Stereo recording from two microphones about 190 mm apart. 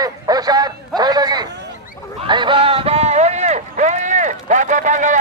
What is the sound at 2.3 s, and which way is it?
Run, 25° right (ahead or behind).